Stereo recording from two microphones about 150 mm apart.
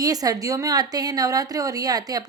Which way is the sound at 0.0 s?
25° right (ahead or behind).